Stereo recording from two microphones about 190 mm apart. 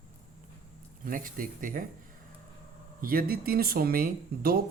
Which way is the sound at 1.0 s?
45° right (ahead or behind).